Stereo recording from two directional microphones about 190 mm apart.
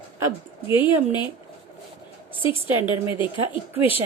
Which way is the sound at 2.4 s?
25° left (ahead or behind).